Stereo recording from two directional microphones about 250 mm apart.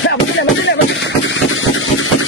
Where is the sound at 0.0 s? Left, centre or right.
Left.